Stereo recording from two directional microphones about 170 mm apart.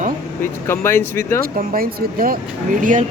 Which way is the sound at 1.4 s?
60° right (ahead or behind).